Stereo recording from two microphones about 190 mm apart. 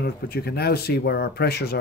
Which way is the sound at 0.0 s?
55° left (ahead or behind).